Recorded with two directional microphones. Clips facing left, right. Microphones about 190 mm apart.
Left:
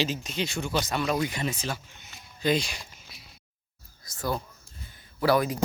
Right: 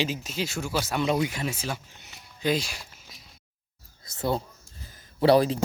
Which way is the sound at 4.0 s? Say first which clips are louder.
Right 3 dB; 25° right (ahead or behind).